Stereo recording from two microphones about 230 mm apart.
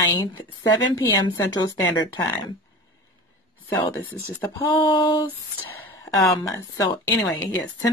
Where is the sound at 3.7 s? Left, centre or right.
Centre.